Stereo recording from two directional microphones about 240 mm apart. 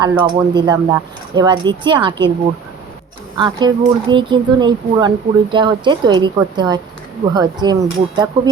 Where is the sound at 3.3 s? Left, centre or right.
Centre.